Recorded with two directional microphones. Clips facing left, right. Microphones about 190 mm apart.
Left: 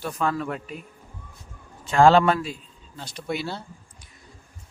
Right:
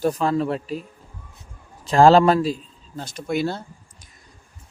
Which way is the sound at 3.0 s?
45° right (ahead or behind).